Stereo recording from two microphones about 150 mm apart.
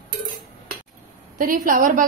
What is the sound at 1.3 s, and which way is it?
Speech, 65° right (ahead or behind).